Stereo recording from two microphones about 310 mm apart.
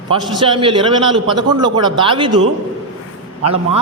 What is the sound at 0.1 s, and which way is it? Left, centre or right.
A man's voice, centre.